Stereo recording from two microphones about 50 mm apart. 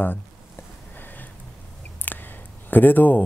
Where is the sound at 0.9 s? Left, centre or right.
Left.